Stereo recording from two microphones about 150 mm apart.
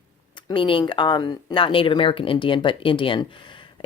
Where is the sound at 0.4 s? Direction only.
35° left (ahead or behind).